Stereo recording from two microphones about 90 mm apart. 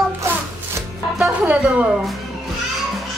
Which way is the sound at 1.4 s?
15° right (ahead or behind).